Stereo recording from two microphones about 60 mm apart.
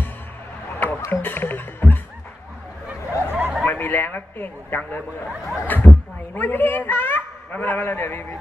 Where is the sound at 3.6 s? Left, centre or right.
Left.